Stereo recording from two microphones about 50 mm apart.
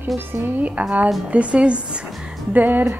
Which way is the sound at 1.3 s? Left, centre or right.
Right.